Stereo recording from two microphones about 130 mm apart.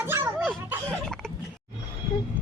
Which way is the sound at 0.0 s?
20° right (ahead or behind).